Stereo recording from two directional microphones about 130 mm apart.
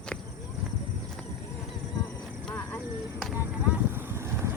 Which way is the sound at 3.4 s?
15° right (ahead or behind).